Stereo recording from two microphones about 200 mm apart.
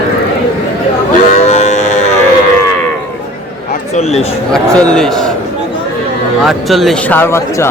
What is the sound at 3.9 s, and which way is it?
Speech, 30° left (ahead or behind).